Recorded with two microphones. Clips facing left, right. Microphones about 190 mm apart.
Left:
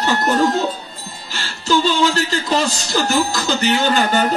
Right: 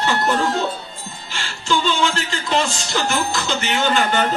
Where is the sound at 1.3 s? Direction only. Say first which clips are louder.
Left 4 dB; 40° left (ahead or behind).